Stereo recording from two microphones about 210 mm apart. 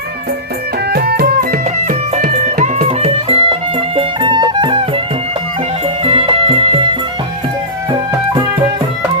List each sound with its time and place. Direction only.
0.9 s music: 50° right (ahead or behind); by 4.8 s 20° right (ahead or behind)
6.1 s music: 25° right (ahead or behind)